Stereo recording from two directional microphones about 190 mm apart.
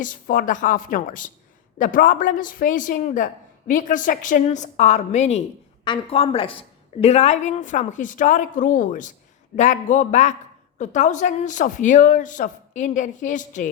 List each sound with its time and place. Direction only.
0.0 s a woman's voice: 45° left (ahead or behind)
5.8 s a woman's voice: 25° left (ahead or behind); by 13.7 s 40° left (ahead or behind)